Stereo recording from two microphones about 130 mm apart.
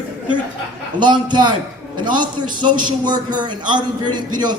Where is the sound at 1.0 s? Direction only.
35° right (ahead or behind).